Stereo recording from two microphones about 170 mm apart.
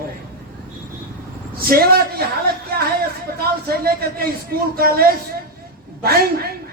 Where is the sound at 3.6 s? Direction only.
60° right (ahead or behind).